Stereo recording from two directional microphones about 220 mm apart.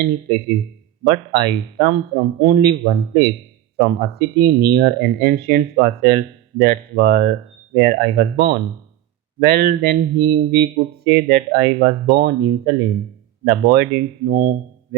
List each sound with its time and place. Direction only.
0.0 s speech: 45° right (ahead or behind)